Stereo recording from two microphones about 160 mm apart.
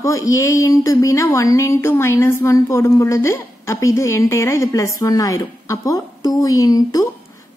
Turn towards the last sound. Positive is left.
turn(degrees=20)  # may be behind; listen again after turning